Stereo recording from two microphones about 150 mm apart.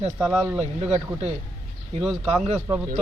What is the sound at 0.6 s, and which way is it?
Speech, 45° right (ahead or behind).